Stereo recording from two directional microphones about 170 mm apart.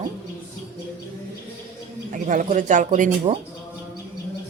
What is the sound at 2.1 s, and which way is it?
A man's voice, 50° right (ahead or behind).